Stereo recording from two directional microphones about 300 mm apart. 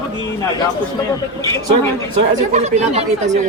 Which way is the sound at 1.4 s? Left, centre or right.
Centre.